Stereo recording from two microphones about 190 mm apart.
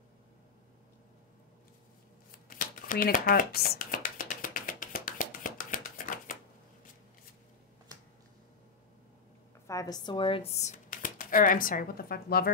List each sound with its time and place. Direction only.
2.3 s shuffling cards: 50° left (ahead or behind)
9.7 s speech: 20° left (ahead or behind); by 12.5 s 55° left (ahead or behind)